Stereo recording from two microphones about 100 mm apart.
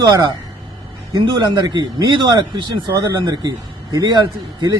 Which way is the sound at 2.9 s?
35° right (ahead or behind).